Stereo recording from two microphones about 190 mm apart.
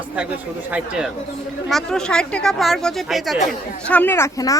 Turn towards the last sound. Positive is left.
turn(degrees=15)  # may be behind; listen again after turning